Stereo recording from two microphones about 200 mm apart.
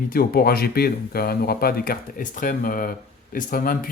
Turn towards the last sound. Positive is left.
turn(degrees=45)  # may be behind; listen again after turning